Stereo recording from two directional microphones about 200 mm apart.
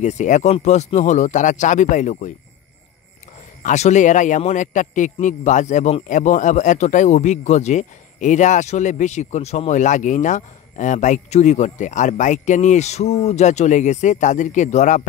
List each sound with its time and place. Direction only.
0.0 s a man's voice: 35° left (ahead or behind)
3.6 s a man's voice: 35° left (ahead or behind)